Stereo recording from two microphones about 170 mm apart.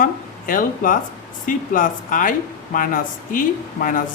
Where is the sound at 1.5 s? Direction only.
55° left (ahead or behind).